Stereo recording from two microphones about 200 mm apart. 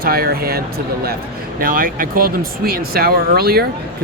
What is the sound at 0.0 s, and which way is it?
Speech, 50° right (ahead or behind).